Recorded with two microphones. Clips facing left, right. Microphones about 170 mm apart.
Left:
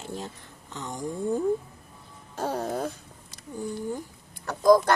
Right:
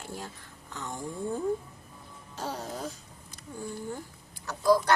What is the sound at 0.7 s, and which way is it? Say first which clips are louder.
Speech: left 4 dB; 20° left (ahead or behind).